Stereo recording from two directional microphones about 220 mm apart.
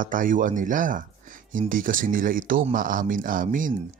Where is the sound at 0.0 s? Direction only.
40° right (ahead or behind).